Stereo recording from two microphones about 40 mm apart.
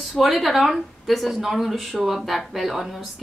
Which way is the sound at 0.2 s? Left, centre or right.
Centre.